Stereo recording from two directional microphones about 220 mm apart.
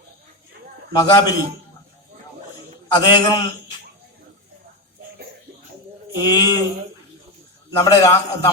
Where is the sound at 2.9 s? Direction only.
20° left (ahead or behind).